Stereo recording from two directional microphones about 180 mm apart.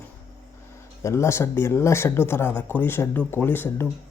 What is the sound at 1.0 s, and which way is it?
Speech, 15° left (ahead or behind).